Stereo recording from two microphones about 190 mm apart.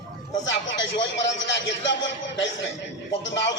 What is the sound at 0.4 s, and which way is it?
A man's voice, 75° left (ahead or behind).